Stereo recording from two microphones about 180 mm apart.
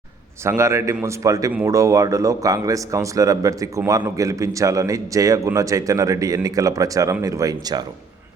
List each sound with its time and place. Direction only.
0.4 s speech: 15° right (ahead or behind)